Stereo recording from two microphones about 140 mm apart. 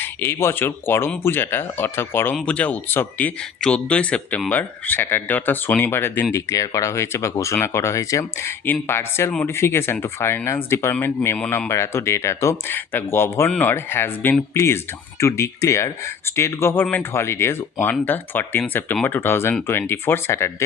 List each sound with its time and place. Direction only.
0.0 s speech: 15° left (ahead or behind)